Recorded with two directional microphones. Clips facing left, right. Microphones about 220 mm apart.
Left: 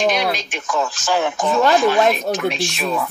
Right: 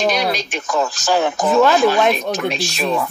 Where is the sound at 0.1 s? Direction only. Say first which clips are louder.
Right 1 dB; 40° right (ahead or behind).